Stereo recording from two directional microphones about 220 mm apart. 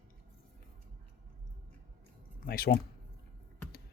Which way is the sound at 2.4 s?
40° left (ahead or behind).